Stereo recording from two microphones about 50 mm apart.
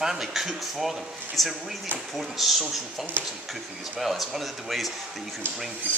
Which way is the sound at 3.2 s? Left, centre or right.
Right.